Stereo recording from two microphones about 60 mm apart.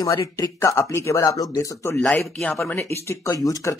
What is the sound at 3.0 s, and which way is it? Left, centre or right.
Speech, left.